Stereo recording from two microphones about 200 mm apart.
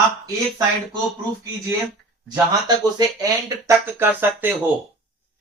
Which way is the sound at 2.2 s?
20° right (ahead or behind).